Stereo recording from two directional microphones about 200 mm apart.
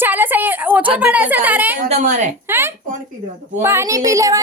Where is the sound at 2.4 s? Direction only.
10° right (ahead or behind).